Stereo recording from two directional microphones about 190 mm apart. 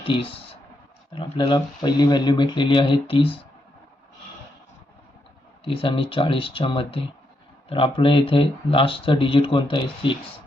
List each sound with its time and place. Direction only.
0.0 s speech: 30° left (ahead or behind)
5.6 s speech: 30° left (ahead or behind)